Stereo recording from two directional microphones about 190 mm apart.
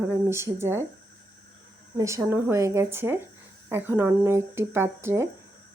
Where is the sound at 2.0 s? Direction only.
15° right (ahead or behind).